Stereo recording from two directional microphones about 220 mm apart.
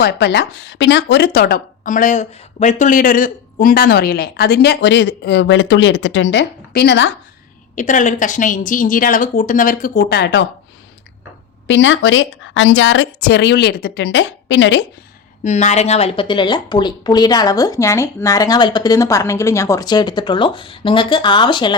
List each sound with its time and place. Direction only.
0.0 s speech: 50° left (ahead or behind)
7.8 s speech: 35° left (ahead or behind)
11.7 s speech: 60° left (ahead or behind)
15.4 s speech: 30° left (ahead or behind)